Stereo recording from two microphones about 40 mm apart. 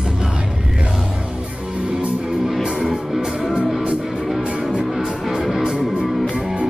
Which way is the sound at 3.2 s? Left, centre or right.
Centre.